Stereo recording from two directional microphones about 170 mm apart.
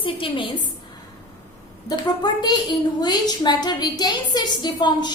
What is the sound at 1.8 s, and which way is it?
A woman's voice, 25° left (ahead or behind).